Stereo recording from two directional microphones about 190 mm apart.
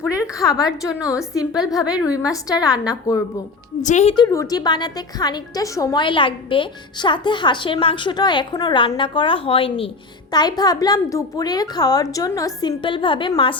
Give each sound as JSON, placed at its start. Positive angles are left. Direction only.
{"t": 0.2, "sound": "a woman's voice", "side_deg": 20}
{"t": 3.8, "sound": "a woman's voice", "side_deg": 40}
{"t": 4.1, "sound": "a woman's voice", "side_deg": 20}